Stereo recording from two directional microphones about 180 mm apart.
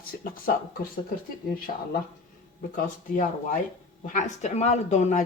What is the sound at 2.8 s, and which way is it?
Speech, 50° left (ahead or behind).